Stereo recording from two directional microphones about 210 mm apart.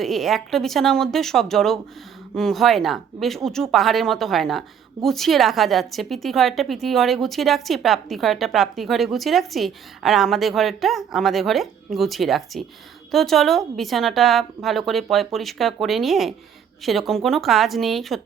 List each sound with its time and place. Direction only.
0.0 s a woman's voice: centre (ahead or behind)